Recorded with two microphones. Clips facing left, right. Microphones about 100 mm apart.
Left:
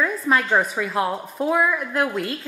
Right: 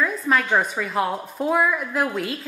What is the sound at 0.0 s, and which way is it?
A woman's voice, centre (ahead or behind).